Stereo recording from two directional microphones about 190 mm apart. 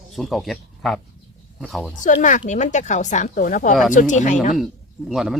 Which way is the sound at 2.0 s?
40° left (ahead or behind).